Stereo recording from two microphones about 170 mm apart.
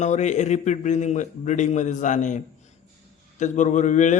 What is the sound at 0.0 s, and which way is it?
A man's voice, 45° left (ahead or behind).